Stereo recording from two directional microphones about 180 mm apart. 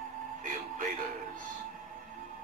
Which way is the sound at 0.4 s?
50° right (ahead or behind).